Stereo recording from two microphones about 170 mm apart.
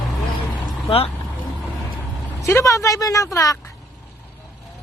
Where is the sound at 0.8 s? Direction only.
35° left (ahead or behind).